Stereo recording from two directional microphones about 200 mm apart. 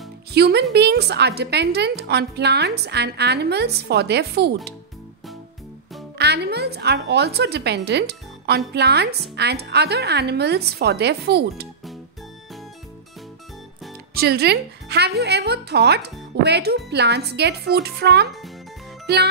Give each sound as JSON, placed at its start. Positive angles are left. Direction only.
{"t": 0.3, "sound": "a woman's voice", "side_deg": -55}
{"t": 6.1, "sound": "a woman's voice", "side_deg": -55}
{"t": 14.1, "sound": "a woman's voice", "side_deg": -55}